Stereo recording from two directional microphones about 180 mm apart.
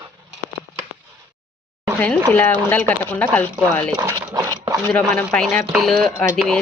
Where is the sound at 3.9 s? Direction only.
20° right (ahead or behind).